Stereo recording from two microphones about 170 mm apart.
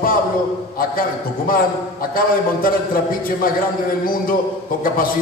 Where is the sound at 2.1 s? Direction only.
55° left (ahead or behind).